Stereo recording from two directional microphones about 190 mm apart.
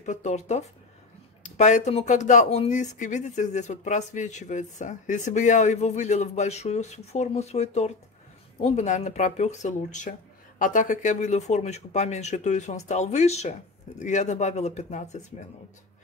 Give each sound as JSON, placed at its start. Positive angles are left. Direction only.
{"t": 0.0, "sound": "speech", "side_deg": 40}